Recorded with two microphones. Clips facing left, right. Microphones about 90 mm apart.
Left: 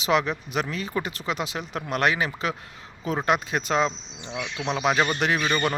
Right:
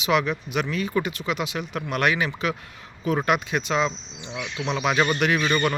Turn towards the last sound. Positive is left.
turn(degrees=10)  # may be behind; listen again after turning